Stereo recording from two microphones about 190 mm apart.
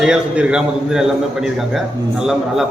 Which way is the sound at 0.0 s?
5° right (ahead or behind).